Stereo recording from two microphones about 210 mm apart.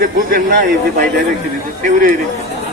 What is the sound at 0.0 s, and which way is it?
A man's voice, 45° right (ahead or behind).